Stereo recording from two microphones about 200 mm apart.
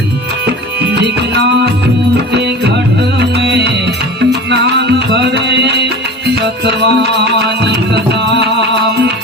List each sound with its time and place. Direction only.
1.0 s music: 60° right (ahead or behind)
3.2 s music: 55° right (ahead or behind)